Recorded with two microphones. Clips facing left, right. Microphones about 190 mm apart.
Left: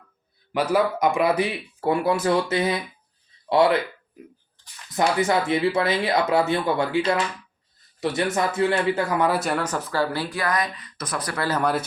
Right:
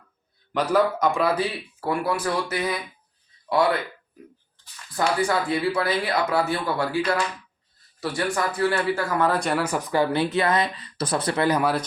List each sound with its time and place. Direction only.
0.5 s speech: 10° left (ahead or behind)
4.9 s speech: 20° left (ahead or behind); by 9.6 s 5° left (ahead or behind)
9.6 s speech: 15° right (ahead or behind)